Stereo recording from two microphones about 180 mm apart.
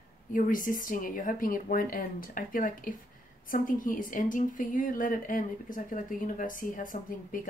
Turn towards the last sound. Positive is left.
turn(degrees=50)  # may be behind; listen again after turning